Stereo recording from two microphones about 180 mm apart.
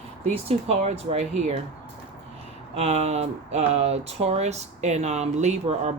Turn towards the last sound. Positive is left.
turn(degrees=-40)  # may be behind; listen again after turning